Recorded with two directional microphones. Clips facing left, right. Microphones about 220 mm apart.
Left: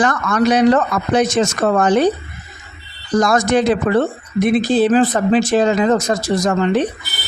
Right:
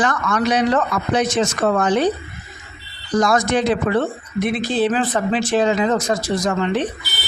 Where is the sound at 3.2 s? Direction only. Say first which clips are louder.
Left 3 dB; 45° left (ahead or behind).